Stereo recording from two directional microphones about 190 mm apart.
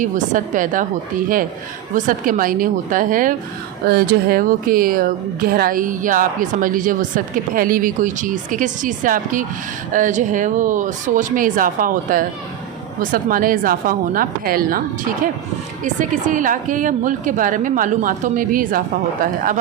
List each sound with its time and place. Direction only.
0.0 s speech: 45° right (ahead or behind)
2.0 s speech: 45° right (ahead or behind)